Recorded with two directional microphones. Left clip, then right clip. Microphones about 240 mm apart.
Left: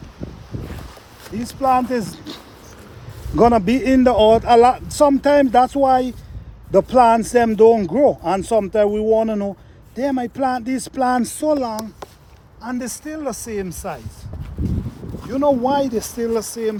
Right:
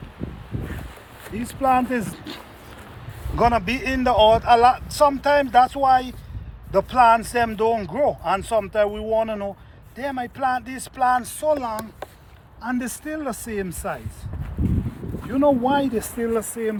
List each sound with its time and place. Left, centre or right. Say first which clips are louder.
1.3 s speech: left 3 dB; left
15.3 s speech: left 2 dB; left